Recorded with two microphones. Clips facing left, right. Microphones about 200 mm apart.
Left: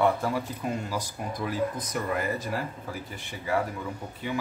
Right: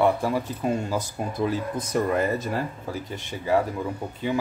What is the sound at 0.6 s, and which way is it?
Speech, 25° right (ahead or behind).